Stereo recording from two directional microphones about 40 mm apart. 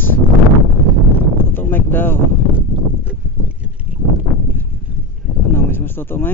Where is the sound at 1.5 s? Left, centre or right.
Left.